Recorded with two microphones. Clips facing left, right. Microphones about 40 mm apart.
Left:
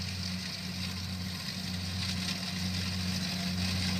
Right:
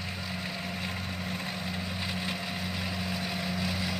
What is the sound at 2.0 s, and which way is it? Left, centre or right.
Vehicle, right.